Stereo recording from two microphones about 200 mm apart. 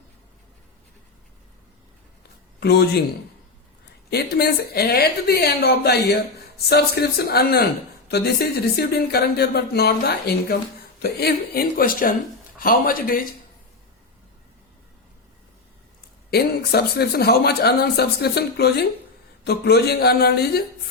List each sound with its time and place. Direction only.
2.6 s speech: 55° left (ahead or behind)
4.1 s speech: 55° left (ahead or behind)
16.3 s speech: 50° left (ahead or behind)